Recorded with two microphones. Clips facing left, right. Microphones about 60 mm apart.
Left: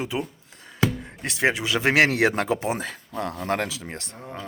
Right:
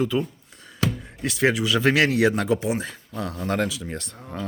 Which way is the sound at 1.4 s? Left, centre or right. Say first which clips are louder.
Right 2 dB; left.